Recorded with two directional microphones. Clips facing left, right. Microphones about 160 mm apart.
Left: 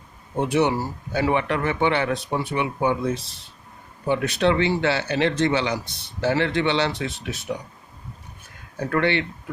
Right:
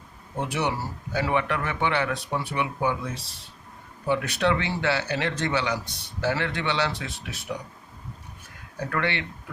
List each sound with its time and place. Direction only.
0.4 s a man's voice: 25° left (ahead or behind)
8.9 s a man's voice: 30° left (ahead or behind)